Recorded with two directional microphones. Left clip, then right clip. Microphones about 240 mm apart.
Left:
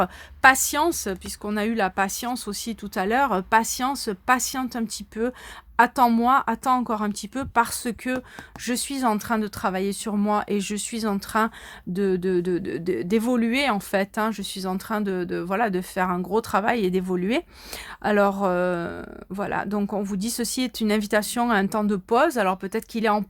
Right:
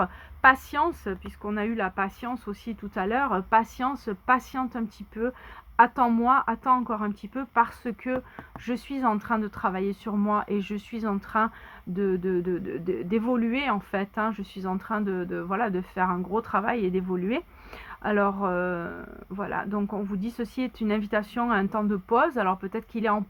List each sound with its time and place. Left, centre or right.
0.0 s speech: left
14.4 s speech: left
14.8 s speech: left
18.3 s speech: left